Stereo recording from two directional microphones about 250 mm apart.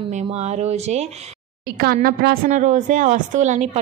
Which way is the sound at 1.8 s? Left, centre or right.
Right.